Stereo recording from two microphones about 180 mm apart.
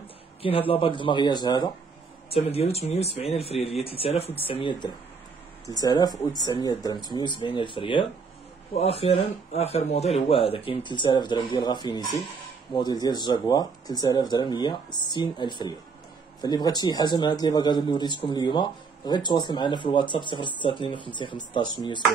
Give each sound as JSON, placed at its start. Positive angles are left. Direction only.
{"t": 0.4, "sound": "speech", "side_deg": 30}
{"t": 2.3, "sound": "speech", "side_deg": 35}